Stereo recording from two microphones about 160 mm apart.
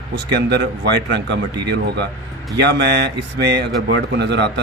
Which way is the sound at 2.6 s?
90° right.